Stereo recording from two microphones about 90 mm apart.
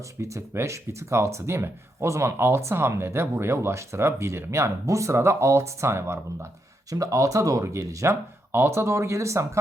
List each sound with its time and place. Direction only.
0.0 s speech: 35° right (ahead or behind)